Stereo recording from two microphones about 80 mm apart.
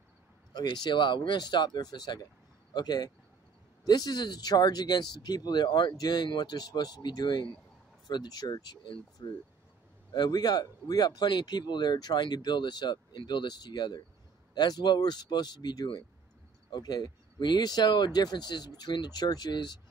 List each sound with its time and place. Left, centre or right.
0.5 s speech: left